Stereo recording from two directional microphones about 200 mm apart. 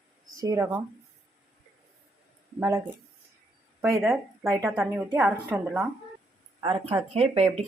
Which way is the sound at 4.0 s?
5° right (ahead or behind).